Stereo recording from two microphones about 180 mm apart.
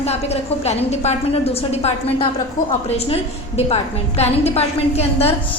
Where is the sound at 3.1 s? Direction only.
35° left (ahead or behind).